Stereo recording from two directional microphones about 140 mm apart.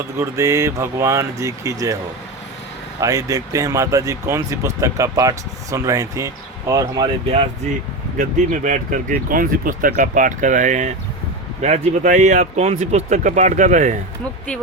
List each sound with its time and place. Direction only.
0.2 s speech: 20° right (ahead or behind)
3.0 s speech: 25° right (ahead or behind)
8.2 s speech: 70° right (ahead or behind)